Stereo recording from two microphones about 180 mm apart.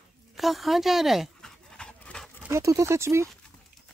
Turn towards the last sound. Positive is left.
turn(degrees=-15)  # may be behind; listen again after turning